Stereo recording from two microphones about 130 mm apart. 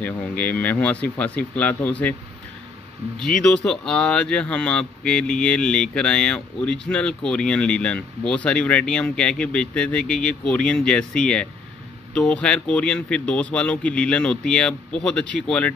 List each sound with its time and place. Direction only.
0.0 s speech: 15° left (ahead or behind)
3.2 s speech: 5° left (ahead or behind)